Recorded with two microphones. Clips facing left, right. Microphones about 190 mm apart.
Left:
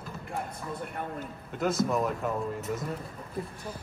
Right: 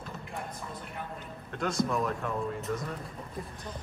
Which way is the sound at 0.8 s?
50° left (ahead or behind).